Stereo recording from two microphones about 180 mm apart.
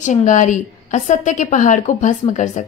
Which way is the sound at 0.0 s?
40° left (ahead or behind).